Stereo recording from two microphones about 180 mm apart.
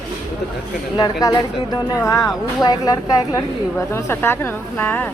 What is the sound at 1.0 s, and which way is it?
A woman's voice, 20° left (ahead or behind).